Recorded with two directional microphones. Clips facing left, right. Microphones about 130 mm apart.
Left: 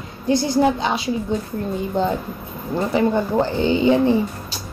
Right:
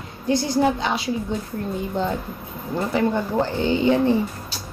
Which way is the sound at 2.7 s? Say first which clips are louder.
Left 3 dB; 20° left (ahead or behind).